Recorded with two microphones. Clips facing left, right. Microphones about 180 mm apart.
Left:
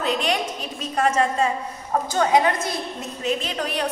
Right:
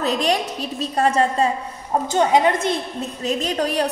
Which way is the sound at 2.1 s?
20° right (ahead or behind).